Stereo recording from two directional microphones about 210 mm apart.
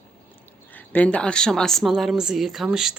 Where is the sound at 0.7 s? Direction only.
10° left (ahead or behind).